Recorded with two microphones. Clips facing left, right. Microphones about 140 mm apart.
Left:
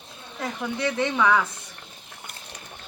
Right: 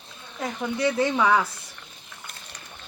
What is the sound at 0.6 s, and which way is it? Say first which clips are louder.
Speech: right 3 dB; 5° right (ahead or behind).